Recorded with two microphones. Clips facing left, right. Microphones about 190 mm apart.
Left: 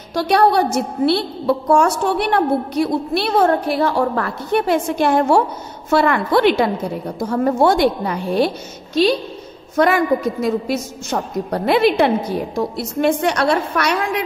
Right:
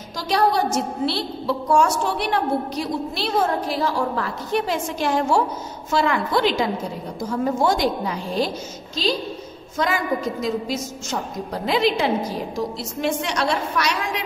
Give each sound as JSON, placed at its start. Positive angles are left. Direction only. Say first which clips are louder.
{"t": 0.1, "sound": "a woman's voice", "louder": "left 6 dB", "side_deg": 60}
{"t": 9.8, "sound": "a woman's voice", "louder": "left 7 dB", "side_deg": 60}